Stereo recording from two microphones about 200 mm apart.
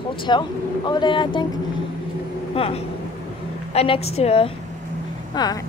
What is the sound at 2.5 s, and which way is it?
A woman's voice, 30° left (ahead or behind).